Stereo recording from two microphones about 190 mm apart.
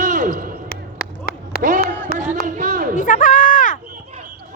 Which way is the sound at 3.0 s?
40° left (ahead or behind).